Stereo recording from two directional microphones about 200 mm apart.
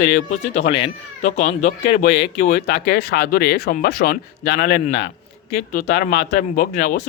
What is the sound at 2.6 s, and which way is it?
Speech, 55° left (ahead or behind).